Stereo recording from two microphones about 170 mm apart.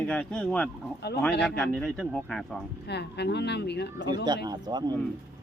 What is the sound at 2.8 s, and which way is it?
Speech, 80° left.